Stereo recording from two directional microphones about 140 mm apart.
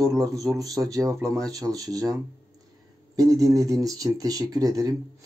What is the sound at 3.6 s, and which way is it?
Speech, 25° right (ahead or behind).